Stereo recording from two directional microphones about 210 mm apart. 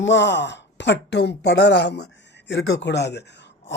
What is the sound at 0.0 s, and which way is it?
Speech, 60° left (ahead or behind).